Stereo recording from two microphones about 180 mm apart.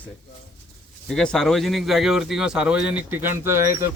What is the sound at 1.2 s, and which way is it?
Speech, centre (ahead or behind).